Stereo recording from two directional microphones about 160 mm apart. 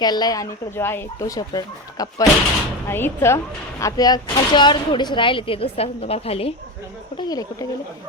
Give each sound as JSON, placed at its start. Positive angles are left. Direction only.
{"t": 0.0, "sound": "a woman's voice", "side_deg": 25}
{"t": 7.2, "sound": "a woman's voice", "side_deg": 25}